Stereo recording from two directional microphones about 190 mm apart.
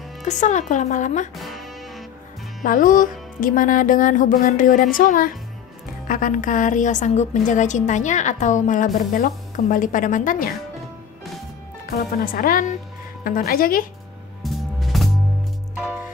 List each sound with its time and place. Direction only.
0.2 s a woman's voice: 40° left (ahead or behind)
1.3 s music: centre (ahead or behind)
2.6 s a woman's voice: 45° left (ahead or behind)
11.8 s speech: 50° left (ahead or behind)
14.4 s music: centre (ahead or behind)